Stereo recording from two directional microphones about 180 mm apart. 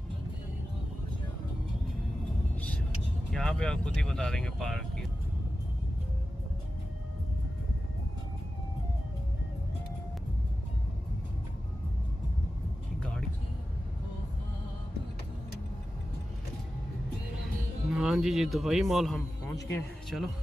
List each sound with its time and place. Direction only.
3.3 s speech: 5° left (ahead or behind)
17.9 s speech: centre (ahead or behind)
19.4 s speech: 15° left (ahead or behind)
20.1 s speech: 5° right (ahead or behind)